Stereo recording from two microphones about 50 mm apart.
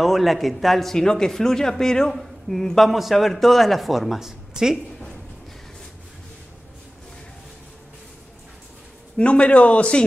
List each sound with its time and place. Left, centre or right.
0.0 s a man's voice: centre
9.1 s a man's voice: left